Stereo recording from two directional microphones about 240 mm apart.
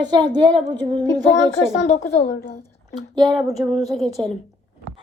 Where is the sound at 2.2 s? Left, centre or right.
Left.